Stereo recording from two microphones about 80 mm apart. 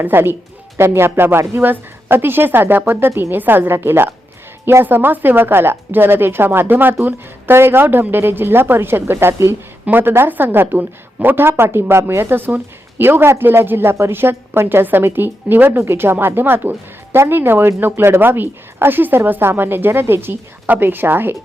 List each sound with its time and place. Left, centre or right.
0.0 s a woman's voice: right